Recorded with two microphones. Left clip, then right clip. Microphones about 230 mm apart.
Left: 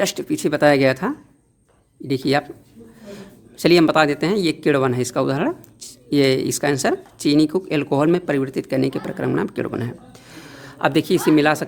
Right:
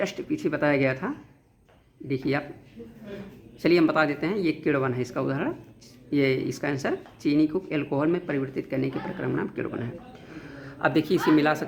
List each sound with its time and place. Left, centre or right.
0.0 s speech: left
3.6 s speech: left